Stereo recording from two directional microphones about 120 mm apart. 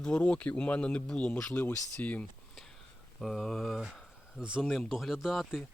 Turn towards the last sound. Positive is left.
turn(degrees=0)  # may be behind; listen again after turning